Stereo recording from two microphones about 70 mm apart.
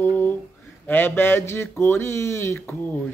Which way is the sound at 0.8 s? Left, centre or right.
Left.